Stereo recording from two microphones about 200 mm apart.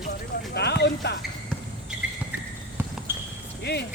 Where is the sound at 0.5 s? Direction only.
55° left (ahead or behind).